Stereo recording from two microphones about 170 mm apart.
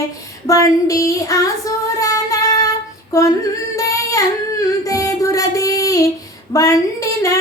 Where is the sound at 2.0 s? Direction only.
20° left (ahead or behind).